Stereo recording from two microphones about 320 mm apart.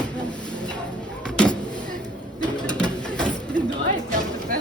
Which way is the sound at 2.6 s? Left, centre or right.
Centre.